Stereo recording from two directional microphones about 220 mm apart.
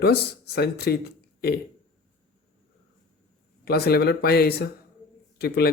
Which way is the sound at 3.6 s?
45° left (ahead or behind).